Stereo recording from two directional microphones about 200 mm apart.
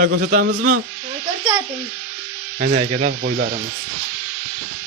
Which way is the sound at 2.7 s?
35° right (ahead or behind).